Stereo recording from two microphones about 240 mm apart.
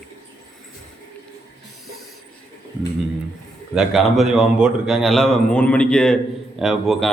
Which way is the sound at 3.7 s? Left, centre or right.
Centre.